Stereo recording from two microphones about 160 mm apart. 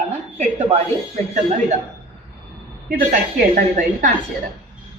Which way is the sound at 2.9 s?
55° right (ahead or behind).